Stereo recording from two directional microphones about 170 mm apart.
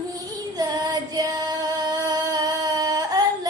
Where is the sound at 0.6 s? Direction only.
20° right (ahead or behind).